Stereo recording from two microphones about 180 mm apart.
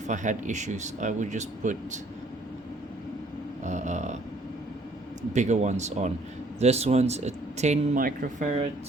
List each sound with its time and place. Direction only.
0.1 s speech: 45° right (ahead or behind)
3.6 s speech: 40° right (ahead or behind)
5.3 s speech: 40° right (ahead or behind)